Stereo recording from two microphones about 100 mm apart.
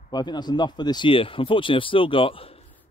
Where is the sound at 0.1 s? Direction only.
45° left (ahead or behind); by 2.6 s 70° left (ahead or behind).